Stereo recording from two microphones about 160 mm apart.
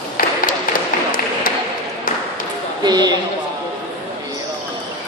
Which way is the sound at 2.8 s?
25° right (ahead or behind).